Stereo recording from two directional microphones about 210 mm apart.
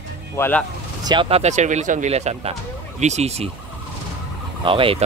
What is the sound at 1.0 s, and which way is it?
Speech, 25° right (ahead or behind).